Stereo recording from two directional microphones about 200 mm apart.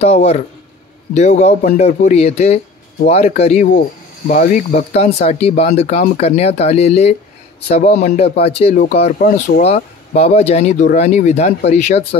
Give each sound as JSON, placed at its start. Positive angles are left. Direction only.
{"t": 0.0, "sound": "speech", "side_deg": 30}